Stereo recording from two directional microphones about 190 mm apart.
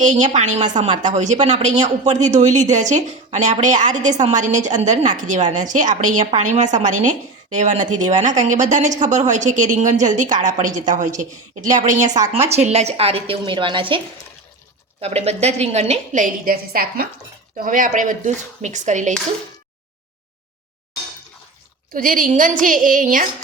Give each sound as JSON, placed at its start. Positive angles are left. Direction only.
{"t": 0.0, "sound": "a woman's voice", "side_deg": -40}
{"t": 15.0, "sound": "a woman's voice", "side_deg": -35}
{"t": 21.9, "sound": "a woman's voice", "side_deg": -45}